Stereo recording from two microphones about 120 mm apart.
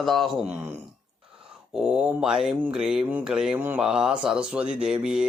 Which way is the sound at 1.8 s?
10° right (ahead or behind).